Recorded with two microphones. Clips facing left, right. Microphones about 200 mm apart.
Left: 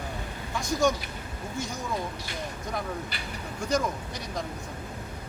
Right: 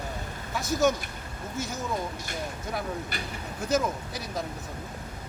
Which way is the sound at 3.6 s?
5° right (ahead or behind).